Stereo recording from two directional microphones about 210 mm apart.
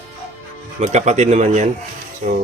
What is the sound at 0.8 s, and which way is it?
Speech, 35° right (ahead or behind).